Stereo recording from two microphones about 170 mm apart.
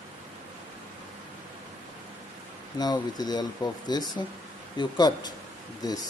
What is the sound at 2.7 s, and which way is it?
Speech, 25° left (ahead or behind).